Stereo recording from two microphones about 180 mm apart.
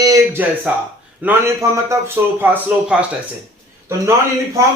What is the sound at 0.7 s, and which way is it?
A man's voice, 5° right (ahead or behind).